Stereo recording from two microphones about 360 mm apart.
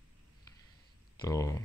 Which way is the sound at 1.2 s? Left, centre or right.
Centre.